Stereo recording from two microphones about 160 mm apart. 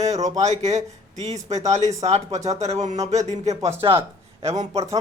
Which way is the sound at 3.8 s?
30° right (ahead or behind).